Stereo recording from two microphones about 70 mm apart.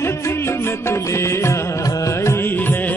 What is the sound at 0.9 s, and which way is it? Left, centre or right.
Music, left.